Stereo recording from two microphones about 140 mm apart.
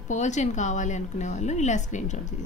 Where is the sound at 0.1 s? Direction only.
60° left (ahead or behind).